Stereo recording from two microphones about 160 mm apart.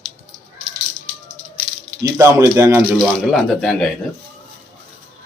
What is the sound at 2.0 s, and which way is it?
Speech, 15° right (ahead or behind).